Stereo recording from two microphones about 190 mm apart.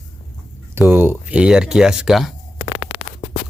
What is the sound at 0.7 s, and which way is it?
Speech, 10° right (ahead or behind).